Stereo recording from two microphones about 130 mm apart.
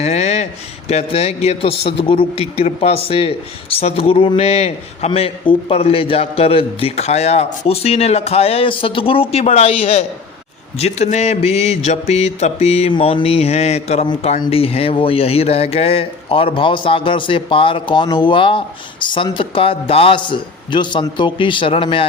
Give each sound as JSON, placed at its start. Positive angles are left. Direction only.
{"t": 0.0, "sound": "a man's voice", "side_deg": 60}